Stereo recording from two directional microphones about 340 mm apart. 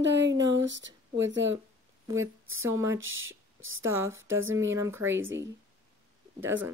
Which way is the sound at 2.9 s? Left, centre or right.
Right.